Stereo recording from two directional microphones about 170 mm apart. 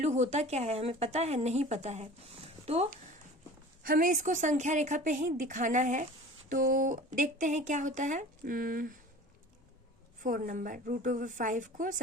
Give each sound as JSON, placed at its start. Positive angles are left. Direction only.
{"t": 0.0, "sound": "speech", "side_deg": -40}
{"t": 3.8, "sound": "speech", "side_deg": -55}
{"t": 10.2, "sound": "speech", "side_deg": -55}